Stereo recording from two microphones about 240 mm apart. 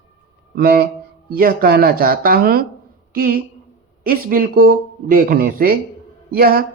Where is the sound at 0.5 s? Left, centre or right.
Right.